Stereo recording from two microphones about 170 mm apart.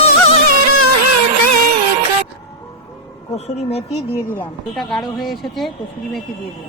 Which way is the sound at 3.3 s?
40° left (ahead or behind).